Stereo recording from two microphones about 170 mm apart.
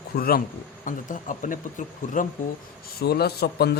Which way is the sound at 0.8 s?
50° left (ahead or behind).